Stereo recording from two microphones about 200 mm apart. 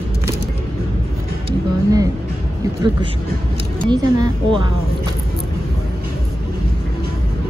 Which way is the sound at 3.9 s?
20° right (ahead or behind).